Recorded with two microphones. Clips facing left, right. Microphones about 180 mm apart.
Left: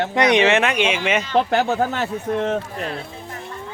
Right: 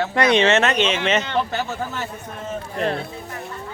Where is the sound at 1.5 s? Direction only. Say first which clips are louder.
Left 7 dB; 75° left (ahead or behind).